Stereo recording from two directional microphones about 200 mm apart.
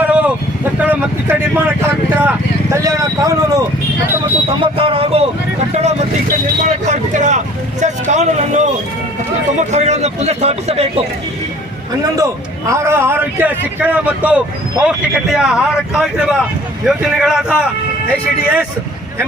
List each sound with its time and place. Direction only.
0.0 s vehicle: 5° right (ahead or behind)
2.7 s a sound: 15° right (ahead or behind)
4.6 s vehicle: 25° right (ahead or behind)
9.6 s speech: 35° right (ahead or behind)
12.1 s a man's voice: 15° right (ahead or behind)